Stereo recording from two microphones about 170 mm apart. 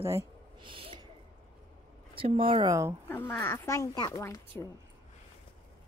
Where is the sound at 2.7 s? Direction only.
15° right (ahead or behind).